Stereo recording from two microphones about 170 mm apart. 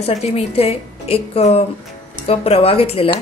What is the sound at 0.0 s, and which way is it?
Speech, 35° left (ahead or behind).